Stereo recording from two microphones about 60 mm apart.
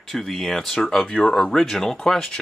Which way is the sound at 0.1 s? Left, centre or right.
Centre.